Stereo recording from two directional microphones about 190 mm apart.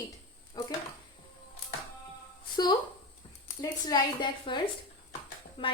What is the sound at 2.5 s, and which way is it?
Speech, 20° left (ahead or behind).